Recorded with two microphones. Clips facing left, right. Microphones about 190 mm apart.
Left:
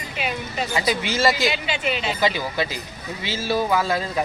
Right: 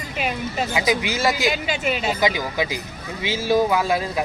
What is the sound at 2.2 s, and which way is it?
Speech, 15° right (ahead or behind).